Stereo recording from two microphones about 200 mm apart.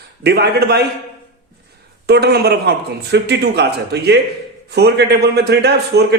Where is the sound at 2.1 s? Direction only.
55° right (ahead or behind).